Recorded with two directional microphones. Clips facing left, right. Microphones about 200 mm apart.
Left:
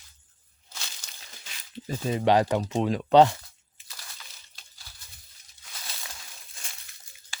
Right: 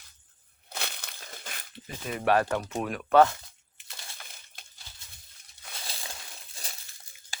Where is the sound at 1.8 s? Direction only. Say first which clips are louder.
Left 4 dB; 25° left (ahead or behind).